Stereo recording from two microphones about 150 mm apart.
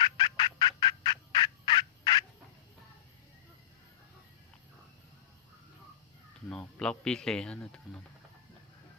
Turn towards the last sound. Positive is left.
turn(degrees=5)  # may be behind; listen again after turning